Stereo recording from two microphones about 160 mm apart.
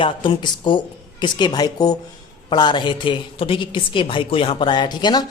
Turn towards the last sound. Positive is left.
turn(degrees=25)  # may be behind; listen again after turning